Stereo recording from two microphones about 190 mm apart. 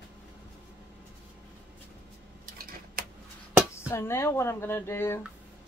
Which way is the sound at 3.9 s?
15° left (ahead or behind).